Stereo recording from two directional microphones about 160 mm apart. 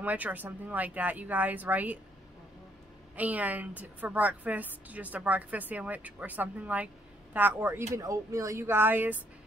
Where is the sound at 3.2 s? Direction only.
10° right (ahead or behind).